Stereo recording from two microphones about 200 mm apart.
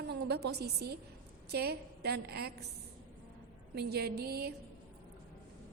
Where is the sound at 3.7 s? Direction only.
55° right (ahead or behind).